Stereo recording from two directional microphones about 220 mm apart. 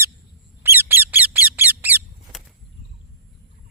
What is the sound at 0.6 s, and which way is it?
Squeak, 10° right (ahead or behind).